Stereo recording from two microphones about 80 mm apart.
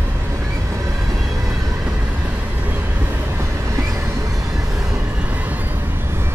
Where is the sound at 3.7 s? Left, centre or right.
Right.